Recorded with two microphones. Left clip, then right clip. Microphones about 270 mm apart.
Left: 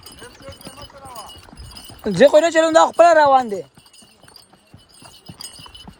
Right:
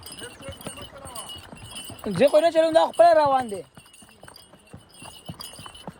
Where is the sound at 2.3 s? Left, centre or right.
Left.